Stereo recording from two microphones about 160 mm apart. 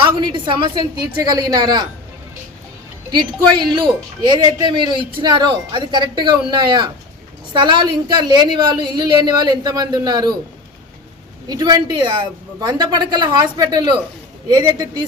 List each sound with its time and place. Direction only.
0.0 s a woman's voice: 30° right (ahead or behind)
3.1 s a woman's voice: 30° right (ahead or behind)
11.4 s a woman's voice: 25° right (ahead or behind)